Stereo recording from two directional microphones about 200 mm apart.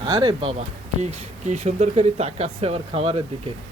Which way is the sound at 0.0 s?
20° right (ahead or behind).